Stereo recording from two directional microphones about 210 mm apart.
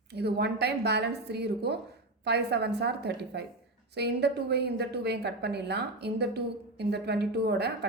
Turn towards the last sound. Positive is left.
turn(degrees=-50)  # may be behind; listen again after turning